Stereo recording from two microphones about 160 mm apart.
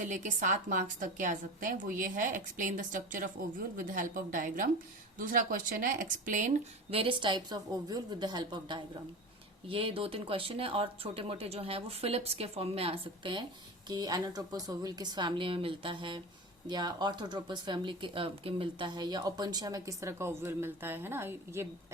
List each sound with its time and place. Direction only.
0.0 s a woman's voice: 50° right (ahead or behind)
6.9 s speech: 35° right (ahead or behind); by 21.7 s 15° right (ahead or behind)